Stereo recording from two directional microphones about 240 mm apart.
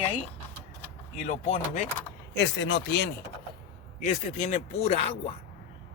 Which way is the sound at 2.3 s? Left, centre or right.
Left.